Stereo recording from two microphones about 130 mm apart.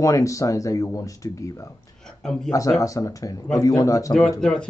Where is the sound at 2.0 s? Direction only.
5° left (ahead or behind).